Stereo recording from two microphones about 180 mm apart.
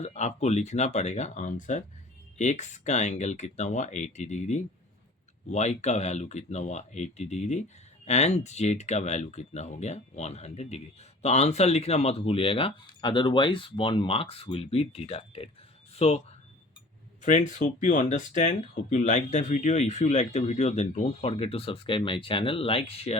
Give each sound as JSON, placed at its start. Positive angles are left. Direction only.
{"t": 0.0, "sound": "speech", "side_deg": 40}
{"t": 17.2, "sound": "speech", "side_deg": 45}